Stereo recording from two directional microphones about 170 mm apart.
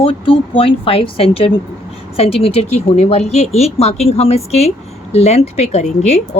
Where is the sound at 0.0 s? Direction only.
35° left (ahead or behind).